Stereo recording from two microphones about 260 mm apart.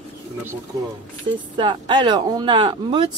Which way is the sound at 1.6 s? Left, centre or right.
Centre.